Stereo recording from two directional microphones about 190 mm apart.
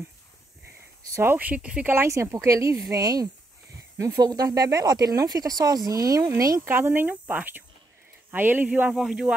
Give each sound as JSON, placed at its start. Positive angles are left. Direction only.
{"t": 1.1, "sound": "speech", "side_deg": -10}